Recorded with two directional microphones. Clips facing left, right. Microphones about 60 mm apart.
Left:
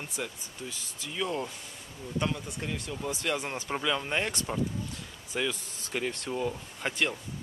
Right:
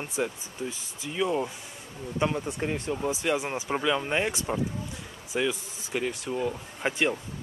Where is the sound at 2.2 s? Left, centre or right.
Right; by 6.5 s centre.